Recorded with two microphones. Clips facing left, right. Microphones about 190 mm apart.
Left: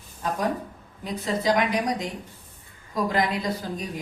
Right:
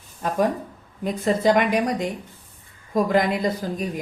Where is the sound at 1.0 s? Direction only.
50° right (ahead or behind).